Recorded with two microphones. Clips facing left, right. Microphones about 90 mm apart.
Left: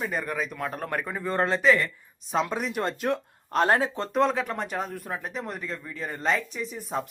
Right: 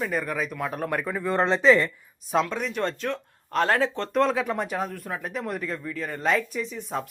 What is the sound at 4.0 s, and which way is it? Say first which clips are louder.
Speech: right 1 dB; centre (ahead or behind).